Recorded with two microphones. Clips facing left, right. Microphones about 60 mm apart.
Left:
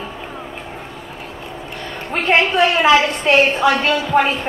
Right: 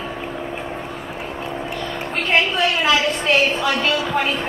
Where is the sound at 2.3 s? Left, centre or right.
Left.